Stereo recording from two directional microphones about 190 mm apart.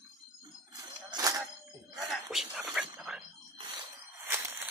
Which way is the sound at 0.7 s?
20° right (ahead or behind).